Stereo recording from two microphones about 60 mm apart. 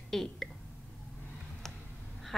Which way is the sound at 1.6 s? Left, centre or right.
Centre.